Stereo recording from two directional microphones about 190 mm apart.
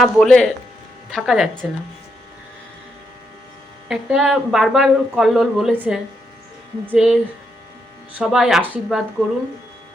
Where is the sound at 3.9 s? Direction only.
5° right (ahead or behind).